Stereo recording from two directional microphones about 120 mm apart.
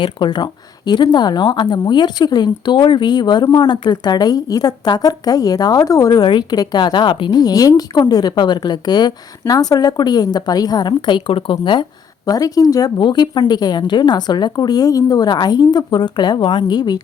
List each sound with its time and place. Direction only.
0.0 s speech: 40° left (ahead or behind)